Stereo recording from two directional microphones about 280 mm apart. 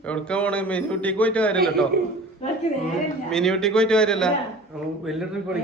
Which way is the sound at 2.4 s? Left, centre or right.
Left.